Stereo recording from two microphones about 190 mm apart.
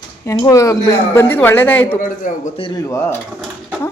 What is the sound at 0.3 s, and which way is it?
A man's voice, 15° left (ahead or behind).